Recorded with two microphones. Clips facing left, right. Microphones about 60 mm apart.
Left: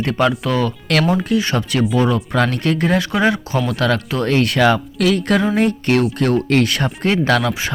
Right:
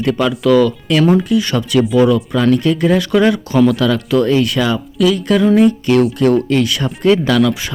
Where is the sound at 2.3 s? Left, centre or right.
Left.